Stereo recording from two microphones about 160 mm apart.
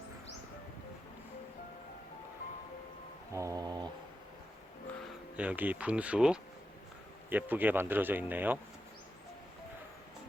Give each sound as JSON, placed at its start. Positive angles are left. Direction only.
{"t": 3.3, "sound": "mantra", "side_deg": -20}
{"t": 5.4, "sound": "speech", "side_deg": -10}